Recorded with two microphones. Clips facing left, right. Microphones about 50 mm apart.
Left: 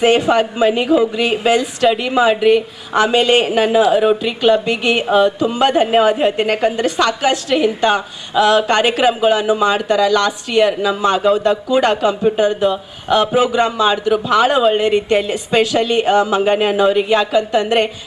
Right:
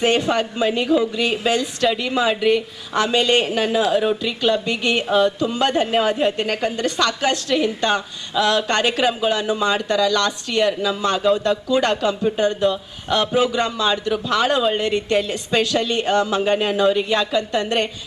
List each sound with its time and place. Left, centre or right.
0.0 s a woman's voice: centre
2.4 s a woman's voice: left
2.9 s a woman's voice: left
4.1 s a woman's voice: left; by 17.7 s centre